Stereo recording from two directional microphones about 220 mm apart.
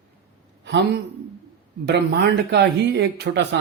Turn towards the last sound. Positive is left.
turn(degrees=-50)  # may be behind; listen again after turning